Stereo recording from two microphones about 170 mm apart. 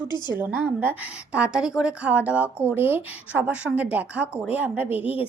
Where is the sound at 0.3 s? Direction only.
10° right (ahead or behind).